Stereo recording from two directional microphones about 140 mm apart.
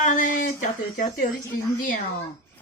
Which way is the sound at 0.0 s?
65° left (ahead or behind).